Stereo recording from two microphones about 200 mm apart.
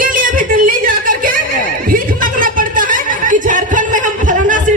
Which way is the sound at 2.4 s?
45° right (ahead or behind).